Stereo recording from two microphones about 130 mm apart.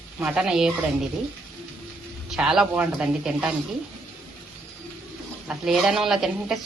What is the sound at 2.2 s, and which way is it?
Speech, 5° right (ahead or behind).